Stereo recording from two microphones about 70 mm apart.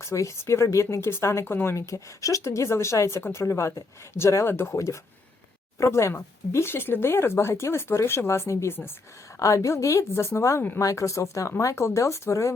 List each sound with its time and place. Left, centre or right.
0.0 s speech: left
1.7 s speech: left
9.4 s speech: left